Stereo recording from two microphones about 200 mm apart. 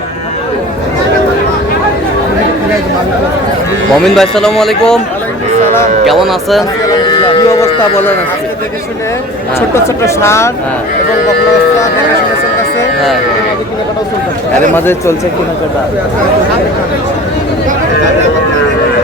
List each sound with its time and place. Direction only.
4.0 s a man's voice: centre (ahead or behind)
6.1 s a man's voice: centre (ahead or behind)
7.0 s speech: 25° left (ahead or behind)
9.6 s speech: 15° left (ahead or behind)